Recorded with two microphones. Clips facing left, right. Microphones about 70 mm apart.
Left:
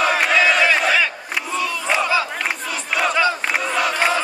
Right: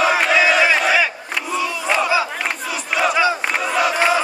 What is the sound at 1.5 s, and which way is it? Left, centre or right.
Battle cry, centre.